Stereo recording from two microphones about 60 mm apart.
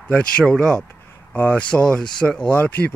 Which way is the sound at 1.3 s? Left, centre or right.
Left.